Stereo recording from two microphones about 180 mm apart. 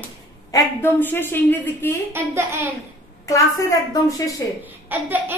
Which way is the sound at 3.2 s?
20° left (ahead or behind).